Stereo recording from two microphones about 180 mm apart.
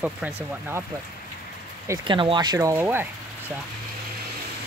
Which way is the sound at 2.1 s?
25° right (ahead or behind).